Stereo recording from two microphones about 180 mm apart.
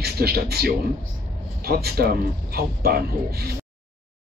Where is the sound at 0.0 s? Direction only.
60° right (ahead or behind).